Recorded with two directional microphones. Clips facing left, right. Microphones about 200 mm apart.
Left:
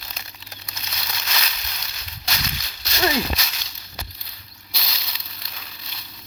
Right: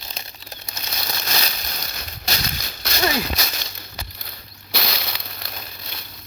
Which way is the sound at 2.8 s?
55° right (ahead or behind).